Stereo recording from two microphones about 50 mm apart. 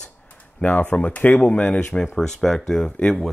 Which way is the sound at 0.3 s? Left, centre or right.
Left.